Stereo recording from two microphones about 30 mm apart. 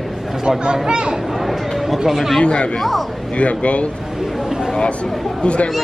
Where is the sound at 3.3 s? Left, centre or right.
Left.